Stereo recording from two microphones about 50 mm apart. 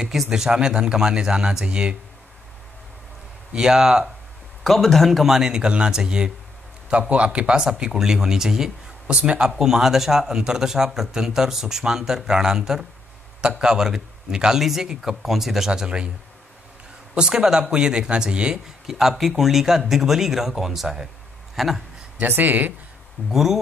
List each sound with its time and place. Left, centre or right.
0.0 s speech: centre
3.5 s speech: centre
4.6 s speech: centre
9.0 s speech: right
9.5 s speech: centre
17.1 s speech: centre
18.9 s speech: centre
22.3 s speech: right
23.3 s speech: centre